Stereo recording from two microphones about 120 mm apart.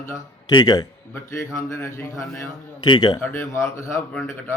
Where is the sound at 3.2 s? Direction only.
20° left (ahead or behind).